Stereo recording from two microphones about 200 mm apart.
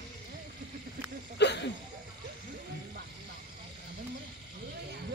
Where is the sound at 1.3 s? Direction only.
60° left (ahead or behind).